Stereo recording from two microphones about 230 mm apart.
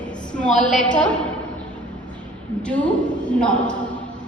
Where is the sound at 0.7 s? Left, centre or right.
Left.